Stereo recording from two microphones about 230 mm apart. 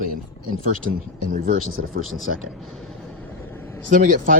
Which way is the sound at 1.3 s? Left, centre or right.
Right.